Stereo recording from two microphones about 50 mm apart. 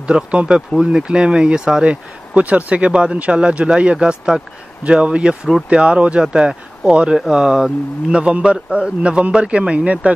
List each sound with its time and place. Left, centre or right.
0.0 s speech: right
1.9 s speech: right